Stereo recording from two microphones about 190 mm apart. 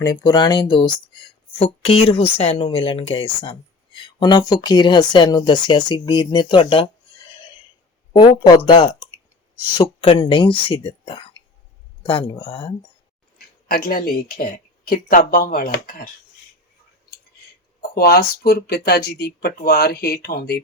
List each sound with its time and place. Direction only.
0.0 s speech: 20° left (ahead or behind)
8.1 s speech: 25° left (ahead or behind)
13.7 s speech: 50° left (ahead or behind)
17.9 s speech: 55° left (ahead or behind)